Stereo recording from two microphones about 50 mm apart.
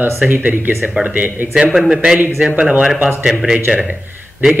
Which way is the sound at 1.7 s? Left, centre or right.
Centre.